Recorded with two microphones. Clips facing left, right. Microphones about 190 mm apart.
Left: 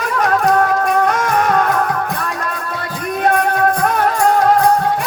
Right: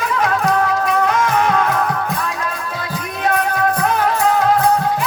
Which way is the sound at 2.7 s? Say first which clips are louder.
Left 3 dB; 55° left (ahead or behind).